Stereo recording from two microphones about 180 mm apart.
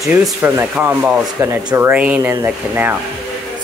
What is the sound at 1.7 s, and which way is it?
Speech, 10° right (ahead or behind).